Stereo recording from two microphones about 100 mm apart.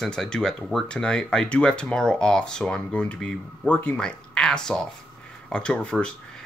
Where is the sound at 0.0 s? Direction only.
5° left (ahead or behind).